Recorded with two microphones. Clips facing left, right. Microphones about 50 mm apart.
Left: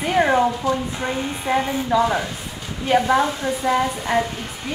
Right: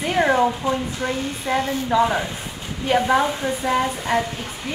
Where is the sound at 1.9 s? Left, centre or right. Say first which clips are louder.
Even; centre.